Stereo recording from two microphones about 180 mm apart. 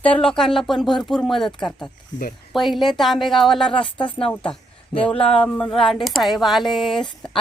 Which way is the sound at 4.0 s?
30° left (ahead or behind).